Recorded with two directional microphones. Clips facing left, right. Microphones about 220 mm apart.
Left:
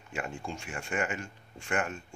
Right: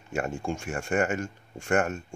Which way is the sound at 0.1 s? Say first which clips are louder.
Right 7 dB; 45° right (ahead or behind).